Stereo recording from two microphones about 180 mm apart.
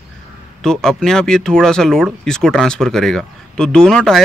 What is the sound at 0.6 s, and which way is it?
Speech, 5° left (ahead or behind).